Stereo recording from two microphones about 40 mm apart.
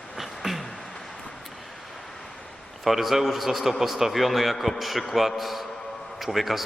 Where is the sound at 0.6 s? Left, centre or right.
Centre.